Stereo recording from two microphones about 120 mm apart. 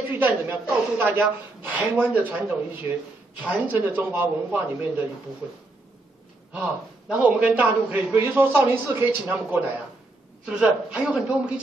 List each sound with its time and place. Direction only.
0.1 s a woman's voice: 15° right (ahead or behind)
6.5 s a man's voice: 10° right (ahead or behind)
9.2 s a man's voice: 5° right (ahead or behind)